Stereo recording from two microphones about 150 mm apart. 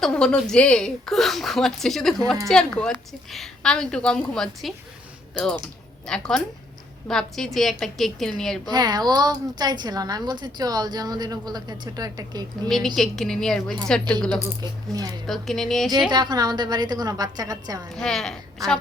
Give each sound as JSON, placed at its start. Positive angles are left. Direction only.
{"t": 0.0, "sound": "a woman's voice", "side_deg": 5}
{"t": 8.6, "sound": "a woman's voice", "side_deg": -25}
{"t": 12.6, "sound": "a woman's voice", "side_deg": 5}
{"t": 14.6, "sound": "a woman's voice", "side_deg": -25}
{"t": 15.3, "sound": "a woman's voice", "side_deg": 0}
{"t": 16.0, "sound": "a woman's voice", "side_deg": -30}
{"t": 17.9, "sound": "a woman's voice", "side_deg": 5}